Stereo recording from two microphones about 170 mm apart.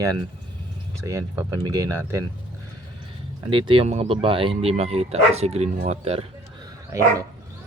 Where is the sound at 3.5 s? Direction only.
30° right (ahead or behind).